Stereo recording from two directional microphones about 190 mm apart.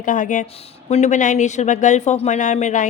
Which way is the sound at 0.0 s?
40° left (ahead or behind).